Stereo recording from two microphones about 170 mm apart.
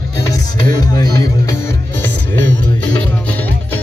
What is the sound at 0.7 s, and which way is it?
Music, 20° left (ahead or behind).